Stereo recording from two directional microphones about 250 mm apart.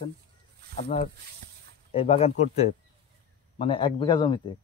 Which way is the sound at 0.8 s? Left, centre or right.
Left.